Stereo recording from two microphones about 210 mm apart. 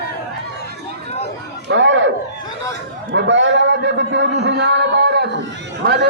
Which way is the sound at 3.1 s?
60° right (ahead or behind).